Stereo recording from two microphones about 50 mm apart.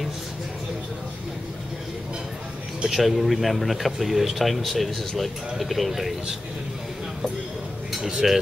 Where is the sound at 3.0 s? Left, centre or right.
Centre.